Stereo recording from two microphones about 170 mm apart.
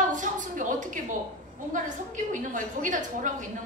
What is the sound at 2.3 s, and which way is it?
A woman's voice, 50° right (ahead or behind).